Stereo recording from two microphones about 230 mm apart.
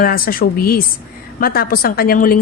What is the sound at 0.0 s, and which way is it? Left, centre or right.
A woman's voice, left.